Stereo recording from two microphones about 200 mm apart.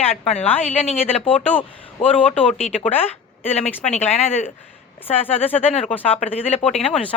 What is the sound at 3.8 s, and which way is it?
Speech, 35° left (ahead or behind).